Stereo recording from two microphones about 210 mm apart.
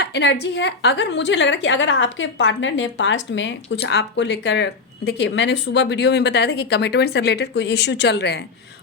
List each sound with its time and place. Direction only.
0.0 s a woman's voice: 55° left (ahead or behind)